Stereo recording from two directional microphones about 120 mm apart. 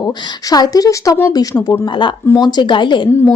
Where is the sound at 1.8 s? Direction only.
45° left (ahead or behind).